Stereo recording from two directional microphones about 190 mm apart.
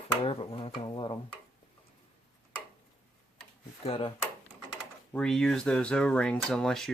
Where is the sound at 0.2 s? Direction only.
30° left (ahead or behind).